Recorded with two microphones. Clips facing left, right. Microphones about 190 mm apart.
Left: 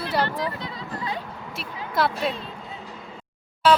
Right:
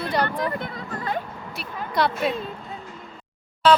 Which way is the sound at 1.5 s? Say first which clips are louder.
Right 1 dB; centre (ahead or behind).